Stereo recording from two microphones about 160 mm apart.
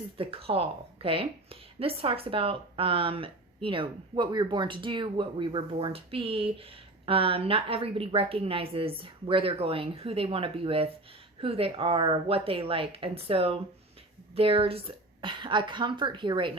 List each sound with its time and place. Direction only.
0.2 s speech: 35° right (ahead or behind)